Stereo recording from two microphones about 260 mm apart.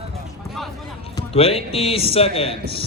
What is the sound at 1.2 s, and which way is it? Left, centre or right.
A man's voice, left.